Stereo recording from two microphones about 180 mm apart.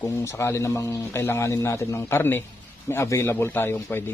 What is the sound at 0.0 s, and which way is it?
Mantra, 15° left (ahead or behind).